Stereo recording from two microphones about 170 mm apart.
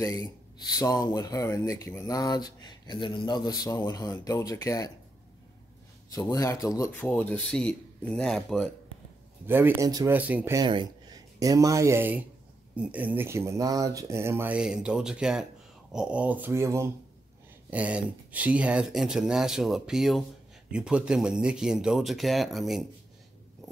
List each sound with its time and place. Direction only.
0.0 s speech: 20° left (ahead or behind)
6.1 s speech: 20° left (ahead or behind); by 8.6 s 5° left (ahead or behind)
9.5 s speech: 10° right (ahead or behind)
10.1 s speech: 10° right (ahead or behind)
10.6 s speech: 25° right (ahead or behind); by 22.8 s centre (ahead or behind)